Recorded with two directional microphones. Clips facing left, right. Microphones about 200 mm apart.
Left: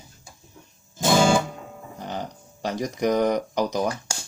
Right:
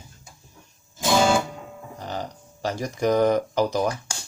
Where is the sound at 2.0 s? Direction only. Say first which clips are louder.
Even; 20° left (ahead or behind).